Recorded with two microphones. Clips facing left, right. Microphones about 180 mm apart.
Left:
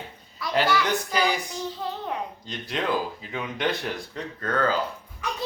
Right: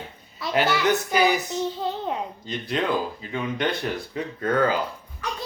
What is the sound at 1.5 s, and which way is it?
Child singing, 25° right (ahead or behind).